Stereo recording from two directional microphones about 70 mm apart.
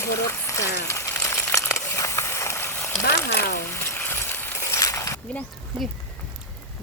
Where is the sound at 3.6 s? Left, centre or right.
Left.